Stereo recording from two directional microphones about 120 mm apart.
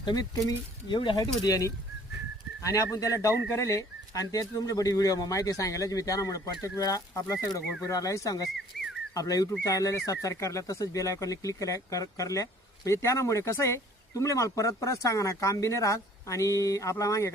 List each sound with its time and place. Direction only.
0.0 s speech: 35° left (ahead or behind)